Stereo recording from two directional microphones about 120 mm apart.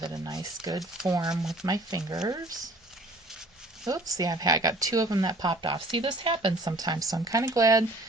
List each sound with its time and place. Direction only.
0.0 s speech: 35° right (ahead or behind)
0.8 s speech: 5° right (ahead or behind)
1.1 s speech: 30° right (ahead or behind)
3.8 s speech: 30° right (ahead or behind)